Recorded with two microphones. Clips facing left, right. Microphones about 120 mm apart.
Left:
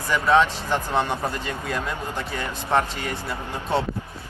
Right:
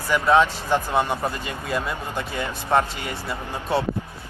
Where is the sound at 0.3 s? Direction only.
10° right (ahead or behind).